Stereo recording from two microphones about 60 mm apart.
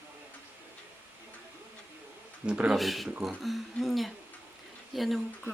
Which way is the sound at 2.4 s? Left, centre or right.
Right.